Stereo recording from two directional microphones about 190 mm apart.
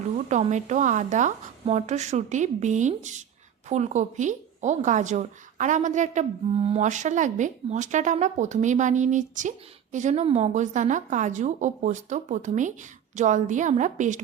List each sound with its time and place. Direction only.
0.3 s a woman's voice: 40° right (ahead or behind)